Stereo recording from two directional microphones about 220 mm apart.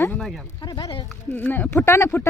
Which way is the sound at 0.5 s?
15° left (ahead or behind).